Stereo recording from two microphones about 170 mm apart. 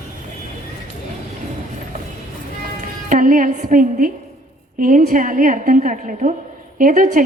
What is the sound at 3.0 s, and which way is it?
A woman's voice, 55° right (ahead or behind).